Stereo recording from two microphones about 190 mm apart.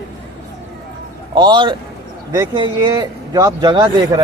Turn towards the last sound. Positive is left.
turn(degrees=-25)  # may be behind; listen again after turning